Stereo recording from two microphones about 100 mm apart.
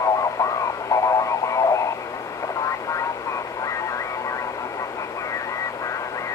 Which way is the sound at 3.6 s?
35° left (ahead or behind).